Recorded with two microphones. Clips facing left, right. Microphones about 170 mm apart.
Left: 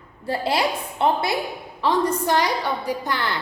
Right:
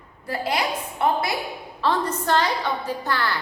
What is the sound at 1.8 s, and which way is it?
A woman's voice, 15° left (ahead or behind).